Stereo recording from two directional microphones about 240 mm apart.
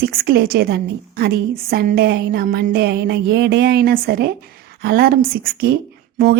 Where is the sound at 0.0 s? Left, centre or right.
Right.